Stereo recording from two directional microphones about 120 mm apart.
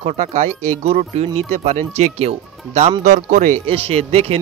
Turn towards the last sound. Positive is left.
turn(degrees=-55)  # may be behind; listen again after turning